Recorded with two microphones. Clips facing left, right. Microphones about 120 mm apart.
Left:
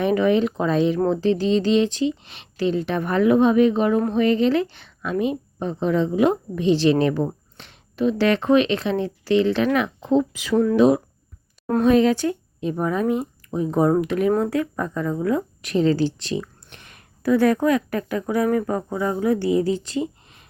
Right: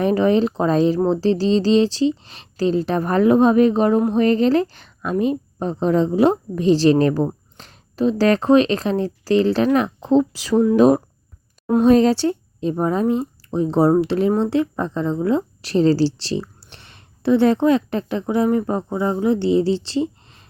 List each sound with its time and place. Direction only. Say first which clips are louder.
0.0 s speech: right 2 dB; 35° right (ahead or behind)